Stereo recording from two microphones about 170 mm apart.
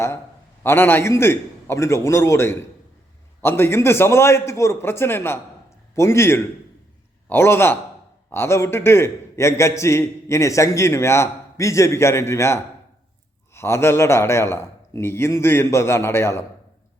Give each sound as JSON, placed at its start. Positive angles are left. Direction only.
{"t": 0.6, "sound": "a man's voice", "side_deg": 15}